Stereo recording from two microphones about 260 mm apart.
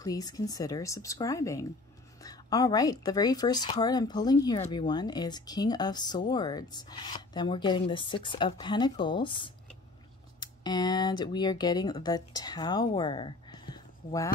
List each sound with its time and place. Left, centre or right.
0.0 s speech: centre